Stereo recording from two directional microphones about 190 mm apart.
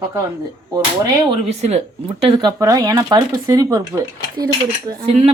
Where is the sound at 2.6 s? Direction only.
20° right (ahead or behind).